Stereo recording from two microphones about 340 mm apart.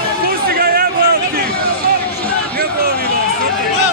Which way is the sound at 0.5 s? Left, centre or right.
Right.